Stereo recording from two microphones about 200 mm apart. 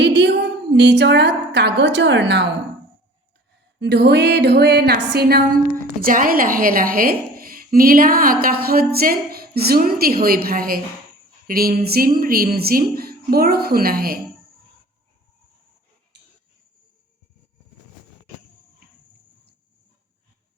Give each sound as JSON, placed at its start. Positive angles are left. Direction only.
{"t": 0.0, "sound": "a woman's voice", "side_deg": -60}
{"t": 3.8, "sound": "a woman's voice", "side_deg": -60}